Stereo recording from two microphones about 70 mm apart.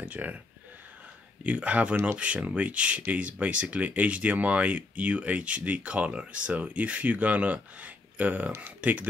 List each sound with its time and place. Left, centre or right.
0.0 s speech: right
1.4 s speech: centre